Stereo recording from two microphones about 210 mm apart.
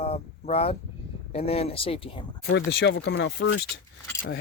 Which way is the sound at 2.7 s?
50° left (ahead or behind).